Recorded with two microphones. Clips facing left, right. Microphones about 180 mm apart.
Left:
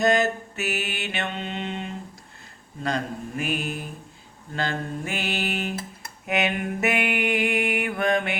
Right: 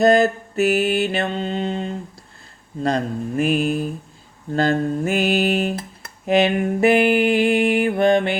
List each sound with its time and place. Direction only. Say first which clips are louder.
0.0 s music: right 7 dB; 35° right (ahead or behind)